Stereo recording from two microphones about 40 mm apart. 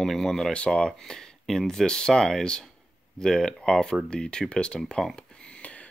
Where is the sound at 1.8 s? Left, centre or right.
Centre.